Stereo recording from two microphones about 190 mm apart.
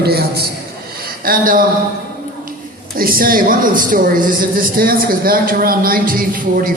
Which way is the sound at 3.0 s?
50° right (ahead or behind).